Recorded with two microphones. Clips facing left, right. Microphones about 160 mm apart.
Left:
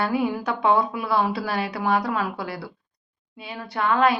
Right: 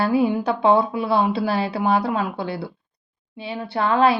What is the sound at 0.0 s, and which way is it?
A woman's voice, 30° right (ahead or behind).